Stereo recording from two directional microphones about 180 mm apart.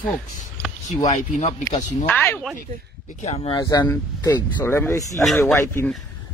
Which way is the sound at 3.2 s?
35° left (ahead or behind).